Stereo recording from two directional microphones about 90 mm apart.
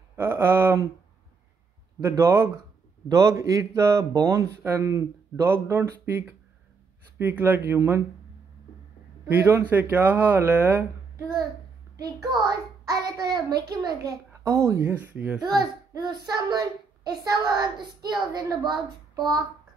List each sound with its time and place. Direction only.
0.1 s speech: 25° right (ahead or behind)
2.0 s a man's voice: 30° right (ahead or behind)
7.2 s speech: 20° right (ahead or behind)
9.3 s speech: 25° right (ahead or behind)
12.2 s a child's voice: 50° right (ahead or behind)
14.4 s a man's voice: 35° right (ahead or behind)
15.1 s a child's voice: 15° right (ahead or behind)
15.4 s a child's voice: 50° right (ahead or behind)